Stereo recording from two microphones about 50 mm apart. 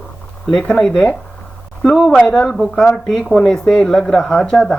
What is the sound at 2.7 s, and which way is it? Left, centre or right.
Speech, centre.